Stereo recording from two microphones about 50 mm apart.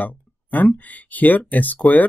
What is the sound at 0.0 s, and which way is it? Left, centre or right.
Speech, left.